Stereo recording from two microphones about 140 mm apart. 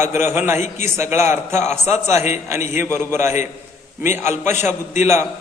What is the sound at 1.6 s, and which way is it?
Speech, 50° left (ahead or behind).